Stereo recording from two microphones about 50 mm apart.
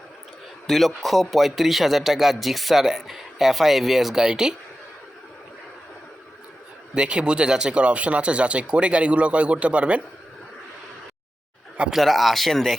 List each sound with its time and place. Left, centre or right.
0.7 s speech: centre
6.9 s speech: right
11.9 s speech: centre